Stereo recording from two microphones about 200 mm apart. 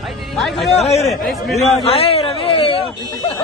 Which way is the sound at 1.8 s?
30° left (ahead or behind).